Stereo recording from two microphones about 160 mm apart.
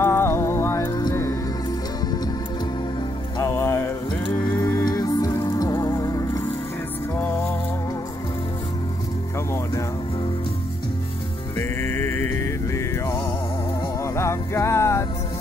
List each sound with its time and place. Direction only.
0.0 s music: 15° left (ahead or behind)
3.3 s music: 15° left (ahead or behind)
11.5 s music: 15° left (ahead or behind)